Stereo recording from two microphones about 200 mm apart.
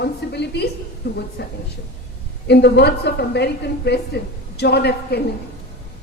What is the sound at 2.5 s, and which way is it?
A woman's voice, 55° left (ahead or behind).